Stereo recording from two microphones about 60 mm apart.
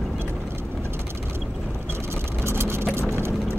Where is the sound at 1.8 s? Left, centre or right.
Right.